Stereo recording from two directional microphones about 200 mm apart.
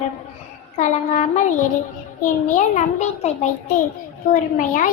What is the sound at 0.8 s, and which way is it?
A child's voice, 35° left (ahead or behind).